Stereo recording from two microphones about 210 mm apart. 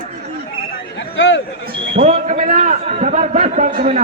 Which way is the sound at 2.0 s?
30° right (ahead or behind).